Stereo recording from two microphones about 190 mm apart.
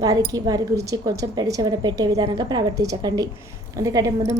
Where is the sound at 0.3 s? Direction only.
20° right (ahead or behind).